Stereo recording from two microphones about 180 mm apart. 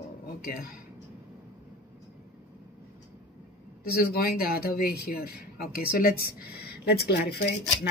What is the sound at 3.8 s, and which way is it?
Speech, 60° left (ahead or behind).